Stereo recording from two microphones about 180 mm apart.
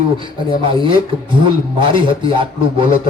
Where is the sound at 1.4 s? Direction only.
25° right (ahead or behind).